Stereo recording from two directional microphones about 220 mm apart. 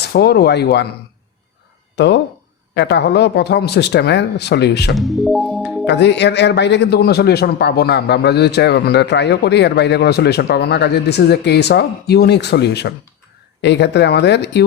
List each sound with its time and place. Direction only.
0.0 s speech: 45° left (ahead or behind)
2.0 s speech: 50° left (ahead or behind)
4.9 s music: centre (ahead or behind)
5.8 s speech: 50° left (ahead or behind)